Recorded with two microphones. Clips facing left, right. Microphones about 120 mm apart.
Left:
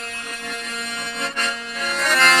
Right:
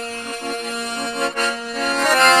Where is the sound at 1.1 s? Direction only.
35° right (ahead or behind).